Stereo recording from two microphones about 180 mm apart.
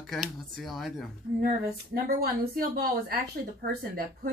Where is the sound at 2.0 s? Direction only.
55° right (ahead or behind).